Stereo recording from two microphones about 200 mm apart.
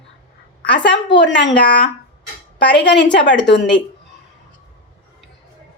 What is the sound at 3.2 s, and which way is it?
Speech, 60° left (ahead or behind).